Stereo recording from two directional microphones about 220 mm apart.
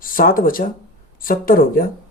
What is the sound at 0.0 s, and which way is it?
Speech, 40° left (ahead or behind).